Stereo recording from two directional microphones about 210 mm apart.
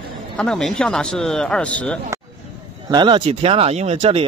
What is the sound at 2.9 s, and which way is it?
Speech, 20° right (ahead or behind).